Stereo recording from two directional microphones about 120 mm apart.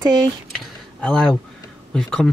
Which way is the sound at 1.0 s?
10° left (ahead or behind).